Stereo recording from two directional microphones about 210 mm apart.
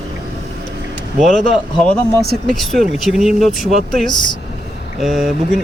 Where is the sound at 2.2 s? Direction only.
45° right (ahead or behind).